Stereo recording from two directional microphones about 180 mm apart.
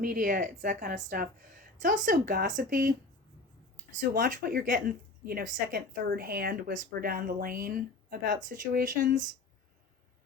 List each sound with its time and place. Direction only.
0.0 s a woman's voice: 50° right (ahead or behind)
3.9 s a woman's voice: 50° right (ahead or behind)